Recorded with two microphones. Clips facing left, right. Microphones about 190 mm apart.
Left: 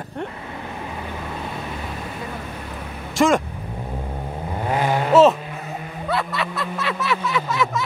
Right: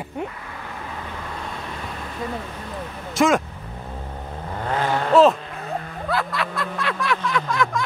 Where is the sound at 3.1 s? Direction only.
Centre (ahead or behind).